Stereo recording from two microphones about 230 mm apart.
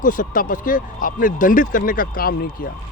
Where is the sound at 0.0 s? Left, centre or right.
Left.